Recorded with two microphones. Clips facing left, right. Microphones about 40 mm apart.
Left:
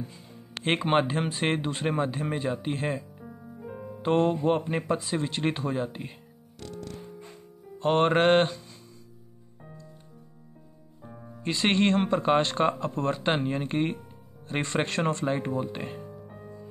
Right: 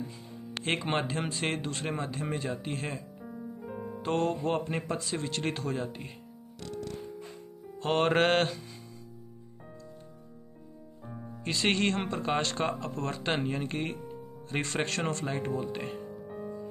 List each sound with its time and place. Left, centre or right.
0.9 s a man's voice: left
3.2 s music: centre
4.0 s a man's voice: left
7.8 s music: centre
11.0 s music: centre; by 12.0 s left
12.1 s a man's voice: left
16.0 s music: centre